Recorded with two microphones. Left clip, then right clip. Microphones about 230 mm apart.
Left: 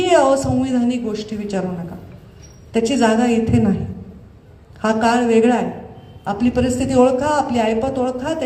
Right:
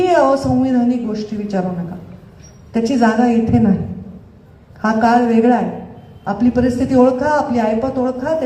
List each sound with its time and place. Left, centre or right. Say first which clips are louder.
0.0 s speech: right 1 dB; left
2.7 s a man's voice: right 1 dB; left
4.8 s a man's voice: right 3 dB; left